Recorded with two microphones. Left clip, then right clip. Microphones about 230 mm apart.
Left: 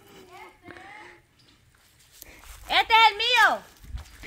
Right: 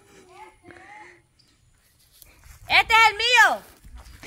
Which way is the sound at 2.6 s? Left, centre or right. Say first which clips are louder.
Right 2 dB; right.